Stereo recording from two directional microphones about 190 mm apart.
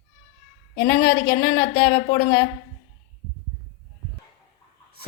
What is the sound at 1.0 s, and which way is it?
Speech, 60° left (ahead or behind).